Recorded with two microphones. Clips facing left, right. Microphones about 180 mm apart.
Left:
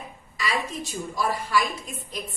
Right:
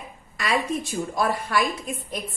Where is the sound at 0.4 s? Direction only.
55° right (ahead or behind).